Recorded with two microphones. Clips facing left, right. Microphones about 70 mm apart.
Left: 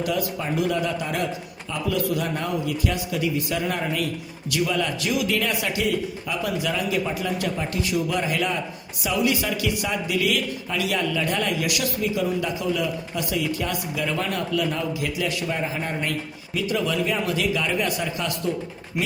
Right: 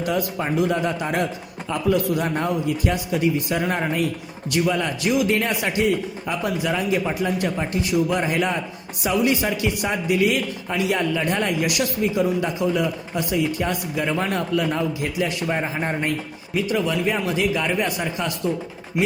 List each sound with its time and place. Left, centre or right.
0.0 s a man's voice: right